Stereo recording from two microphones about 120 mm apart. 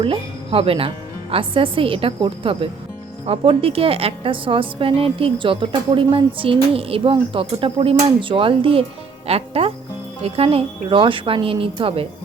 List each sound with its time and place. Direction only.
0.0 s a woman's voice: 50° right (ahead or behind)